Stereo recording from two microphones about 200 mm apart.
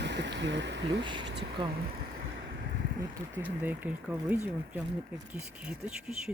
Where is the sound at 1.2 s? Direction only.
55° right (ahead or behind).